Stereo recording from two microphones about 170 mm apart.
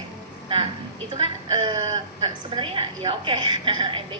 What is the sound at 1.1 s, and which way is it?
A woman's voice, 30° right (ahead or behind).